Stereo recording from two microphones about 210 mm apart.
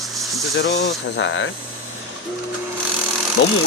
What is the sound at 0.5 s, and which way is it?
Speech, 50° left (ahead or behind).